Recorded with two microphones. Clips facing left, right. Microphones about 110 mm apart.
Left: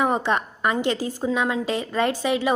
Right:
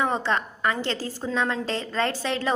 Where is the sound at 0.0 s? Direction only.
15° left (ahead or behind).